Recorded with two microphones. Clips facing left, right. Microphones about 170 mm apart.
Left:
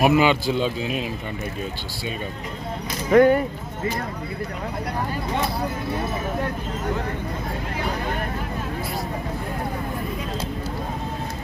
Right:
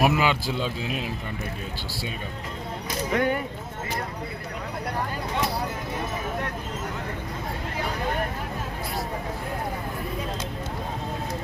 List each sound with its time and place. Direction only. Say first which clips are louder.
0.0 s a man's voice: left 5 dB; centre (ahead or behind)
3.1 s speech: left 10 dB; 45° left (ahead or behind)